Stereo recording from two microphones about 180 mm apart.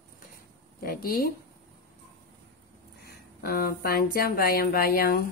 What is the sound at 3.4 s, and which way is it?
Speech, 60° left (ahead or behind).